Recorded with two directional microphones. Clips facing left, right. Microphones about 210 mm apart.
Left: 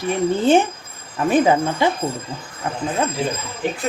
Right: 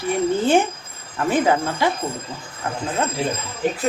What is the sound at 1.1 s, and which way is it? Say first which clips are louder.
Speech: left 3 dB; 20° left (ahead or behind).